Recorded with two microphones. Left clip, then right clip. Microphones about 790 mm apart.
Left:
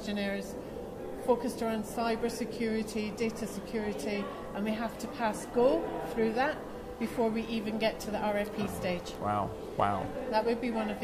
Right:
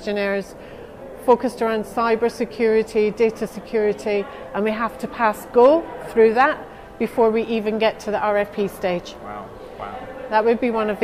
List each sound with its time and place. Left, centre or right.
0.0 s a woman's voice: right
10.3 s a woman's voice: right